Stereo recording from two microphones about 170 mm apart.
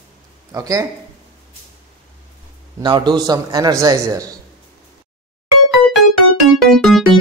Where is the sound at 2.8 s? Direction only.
25° right (ahead or behind).